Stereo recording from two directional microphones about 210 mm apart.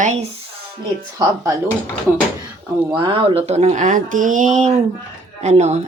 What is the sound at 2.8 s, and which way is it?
Speech, 25° right (ahead or behind).